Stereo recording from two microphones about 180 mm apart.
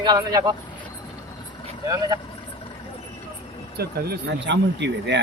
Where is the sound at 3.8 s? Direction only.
60° right (ahead or behind); by 5.2 s 75° right (ahead or behind).